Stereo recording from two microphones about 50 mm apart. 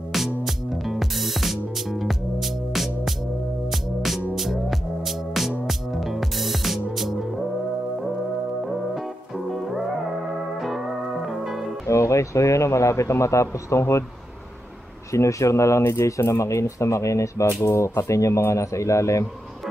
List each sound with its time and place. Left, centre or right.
0.1 s music: centre
4.4 s music: centre
9.5 s music: centre
11.2 s music: centre
11.9 s speech: left
15.1 s a man's voice: left